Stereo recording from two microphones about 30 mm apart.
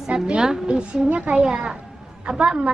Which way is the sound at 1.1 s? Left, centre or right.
Right.